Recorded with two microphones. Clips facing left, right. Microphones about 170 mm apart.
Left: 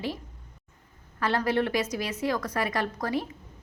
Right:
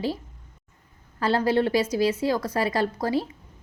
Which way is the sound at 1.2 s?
30° right (ahead or behind).